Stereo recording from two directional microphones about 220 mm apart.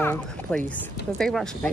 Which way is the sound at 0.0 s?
5° left (ahead or behind).